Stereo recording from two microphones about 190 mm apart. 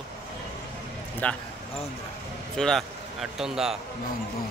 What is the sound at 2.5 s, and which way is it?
Speech, 5° left (ahead or behind).